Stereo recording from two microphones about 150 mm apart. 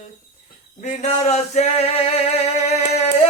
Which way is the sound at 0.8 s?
50° left (ahead or behind).